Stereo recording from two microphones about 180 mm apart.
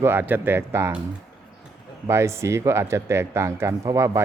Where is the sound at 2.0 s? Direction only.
15° right (ahead or behind).